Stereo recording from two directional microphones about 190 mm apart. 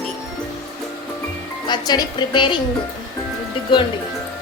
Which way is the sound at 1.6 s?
20° left (ahead or behind).